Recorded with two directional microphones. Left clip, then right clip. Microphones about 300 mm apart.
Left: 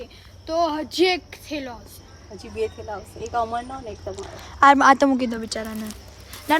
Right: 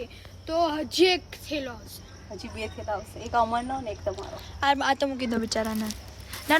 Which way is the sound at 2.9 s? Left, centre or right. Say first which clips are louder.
Right 3 dB; right.